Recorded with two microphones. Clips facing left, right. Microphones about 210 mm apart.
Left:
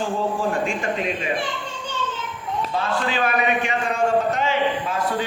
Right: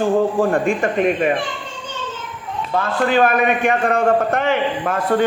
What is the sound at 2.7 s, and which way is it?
A man's voice, 50° right (ahead or behind).